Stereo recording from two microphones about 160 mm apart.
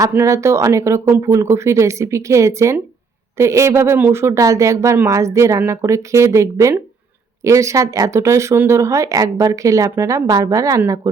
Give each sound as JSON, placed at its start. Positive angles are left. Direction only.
{"t": 0.0, "sound": "speech", "side_deg": -15}